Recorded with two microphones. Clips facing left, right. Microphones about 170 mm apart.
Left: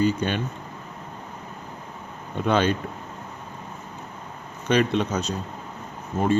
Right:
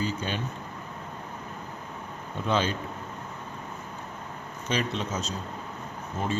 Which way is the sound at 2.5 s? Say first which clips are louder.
Left 5 dB; 60° left (ahead or behind).